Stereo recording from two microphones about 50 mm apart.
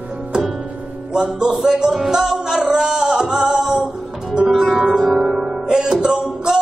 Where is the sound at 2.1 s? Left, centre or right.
Centre.